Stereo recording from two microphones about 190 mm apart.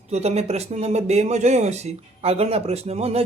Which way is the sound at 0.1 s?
35° right (ahead or behind).